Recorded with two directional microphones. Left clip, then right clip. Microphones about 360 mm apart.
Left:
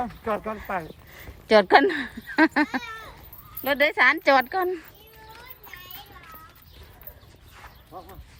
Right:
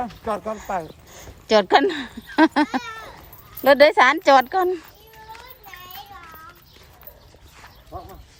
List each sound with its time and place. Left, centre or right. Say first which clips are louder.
0.0 s speech: right 2 dB; centre
2.8 s cat: right 3 dB; right
3.6 s speech: right 7 dB; centre
5.7 s a sound: right 3 dB; centre
7.9 s bow-wow: right 5 dB; right